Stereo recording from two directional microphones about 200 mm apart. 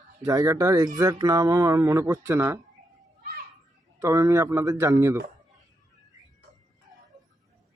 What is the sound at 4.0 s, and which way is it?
Speech, 15° right (ahead or behind).